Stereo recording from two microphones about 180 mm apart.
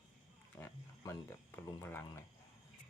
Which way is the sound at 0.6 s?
15° left (ahead or behind).